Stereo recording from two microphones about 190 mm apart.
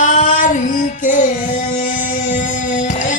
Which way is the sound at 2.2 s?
40° left (ahead or behind).